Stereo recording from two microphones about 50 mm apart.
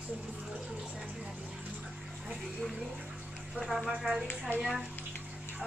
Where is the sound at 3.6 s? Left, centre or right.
Centre.